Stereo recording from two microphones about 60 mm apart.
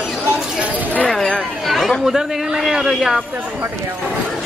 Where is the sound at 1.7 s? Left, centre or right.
Centre.